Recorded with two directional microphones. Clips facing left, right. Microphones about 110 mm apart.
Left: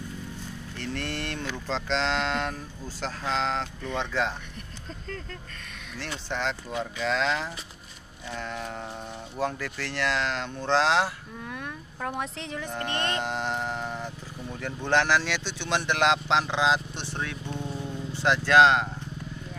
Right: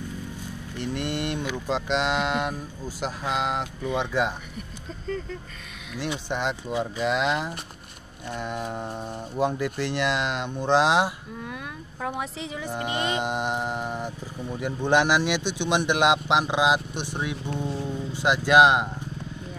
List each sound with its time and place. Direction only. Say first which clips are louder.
0.7 s speech: right 4 dB; 15° right (ahead or behind)
5.9 s speech: right 4 dB; 15° right (ahead or behind)
11.4 s speech: left 1 dB; 5° right (ahead or behind)